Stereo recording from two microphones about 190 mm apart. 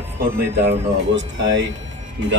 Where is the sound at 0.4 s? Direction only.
60° right (ahead or behind).